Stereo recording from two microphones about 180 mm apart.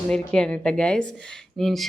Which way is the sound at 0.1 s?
5° left (ahead or behind).